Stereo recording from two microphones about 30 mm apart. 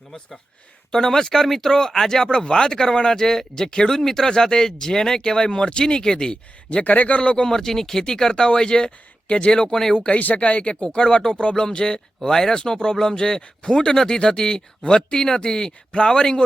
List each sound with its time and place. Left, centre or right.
0.9 s speech: centre
6.8 s a man's voice: left
7.2 s speech: left
7.4 s speech: centre
10.2 s a man's voice: left
10.4 s speech: left
10.9 s speech: left
15.2 s speech: left